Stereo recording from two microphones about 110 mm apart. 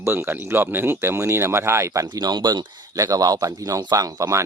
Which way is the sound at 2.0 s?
40° right (ahead or behind).